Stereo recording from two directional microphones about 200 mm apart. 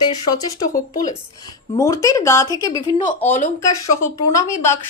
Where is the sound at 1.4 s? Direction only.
15° left (ahead or behind).